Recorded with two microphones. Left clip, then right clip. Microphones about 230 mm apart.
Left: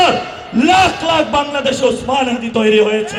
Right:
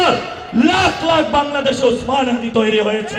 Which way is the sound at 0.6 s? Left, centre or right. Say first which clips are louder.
Left 3 dB; left.